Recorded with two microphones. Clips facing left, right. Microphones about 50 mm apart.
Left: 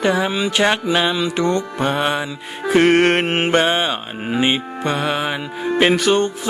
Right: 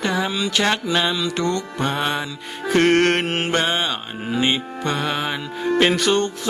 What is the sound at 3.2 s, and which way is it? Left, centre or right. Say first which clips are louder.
Music: left 5 dB; left.